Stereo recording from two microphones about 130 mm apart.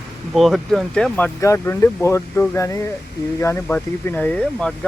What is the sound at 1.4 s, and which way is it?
Speech, 20° left (ahead or behind).